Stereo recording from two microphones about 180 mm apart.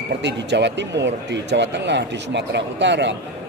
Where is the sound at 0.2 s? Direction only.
75° right (ahead or behind).